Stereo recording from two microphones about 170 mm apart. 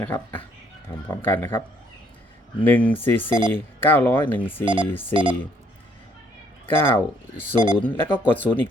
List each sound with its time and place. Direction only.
0.0 s speech: 10° left (ahead or behind)
3.2 s speech: 25° right (ahead or behind)
3.5 s speech: 10° left (ahead or behind)
4.6 s speech: 30° right (ahead or behind)
4.9 s speech: 10° left (ahead or behind)
5.1 s speech: 30° right (ahead or behind)
6.7 s speech: 10° left (ahead or behind)
7.5 s speech: 25° right (ahead or behind)
7.8 s speech: 10° left (ahead or behind)